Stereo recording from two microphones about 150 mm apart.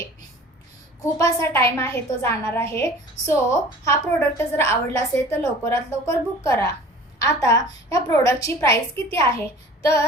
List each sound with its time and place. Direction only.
1.2 s a woman's voice: 20° left (ahead or behind)